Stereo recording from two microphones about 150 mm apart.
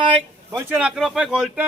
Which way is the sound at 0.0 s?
35° right (ahead or behind).